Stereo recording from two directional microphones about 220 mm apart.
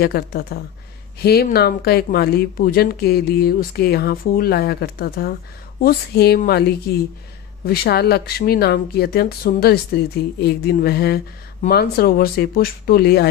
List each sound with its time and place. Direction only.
0.0 s speech: 45° left (ahead or behind)